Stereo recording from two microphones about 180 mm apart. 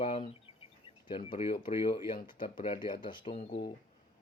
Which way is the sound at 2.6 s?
25° left (ahead or behind).